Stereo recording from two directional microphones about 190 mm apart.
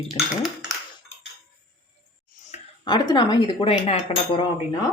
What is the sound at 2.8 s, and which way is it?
Speech, 20° left (ahead or behind).